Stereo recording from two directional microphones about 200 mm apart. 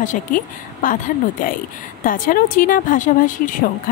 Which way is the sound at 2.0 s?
40° left (ahead or behind).